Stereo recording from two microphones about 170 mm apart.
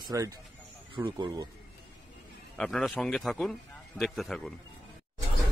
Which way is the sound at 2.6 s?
Centre (ahead or behind).